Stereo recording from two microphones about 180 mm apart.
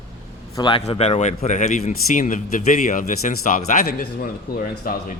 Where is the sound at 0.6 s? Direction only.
25° left (ahead or behind).